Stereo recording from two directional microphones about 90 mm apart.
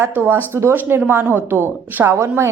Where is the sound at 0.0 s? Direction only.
25° right (ahead or behind).